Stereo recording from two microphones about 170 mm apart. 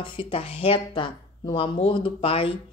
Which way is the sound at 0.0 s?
30° left (ahead or behind).